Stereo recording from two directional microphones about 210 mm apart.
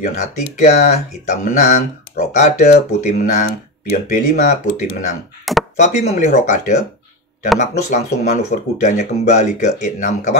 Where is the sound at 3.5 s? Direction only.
45° left (ahead or behind).